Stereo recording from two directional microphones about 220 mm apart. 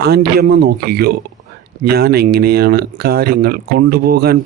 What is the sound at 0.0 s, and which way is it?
Speech, 45° right (ahead or behind).